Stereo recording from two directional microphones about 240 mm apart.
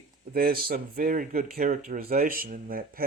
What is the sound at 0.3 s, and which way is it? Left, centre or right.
Speech, right.